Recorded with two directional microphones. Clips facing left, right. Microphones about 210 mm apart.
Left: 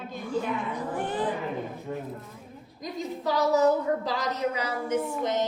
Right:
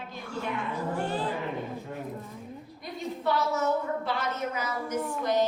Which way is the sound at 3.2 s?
35° left (ahead or behind).